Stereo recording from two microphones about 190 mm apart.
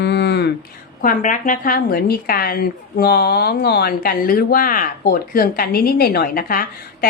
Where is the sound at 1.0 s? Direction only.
45° left (ahead or behind).